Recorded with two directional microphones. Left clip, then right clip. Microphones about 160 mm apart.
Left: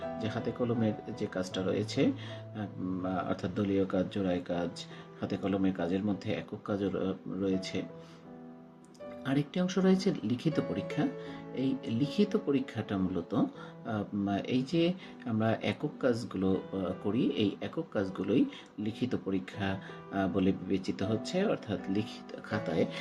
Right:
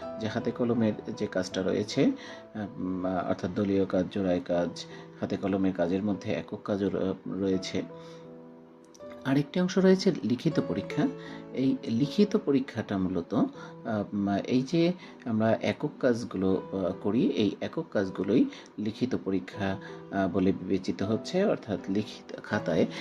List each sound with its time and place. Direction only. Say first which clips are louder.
0.2 s speech: right 6 dB; 20° right (ahead or behind)
9.2 s speech: right 4 dB; 25° right (ahead or behind)